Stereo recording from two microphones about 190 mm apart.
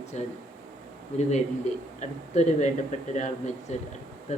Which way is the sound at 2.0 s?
35° left (ahead or behind).